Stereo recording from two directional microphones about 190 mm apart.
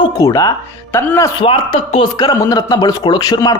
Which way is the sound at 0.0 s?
20° left (ahead or behind).